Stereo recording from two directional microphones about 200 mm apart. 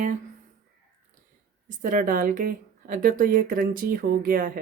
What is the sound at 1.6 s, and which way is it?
Speech, 40° right (ahead or behind).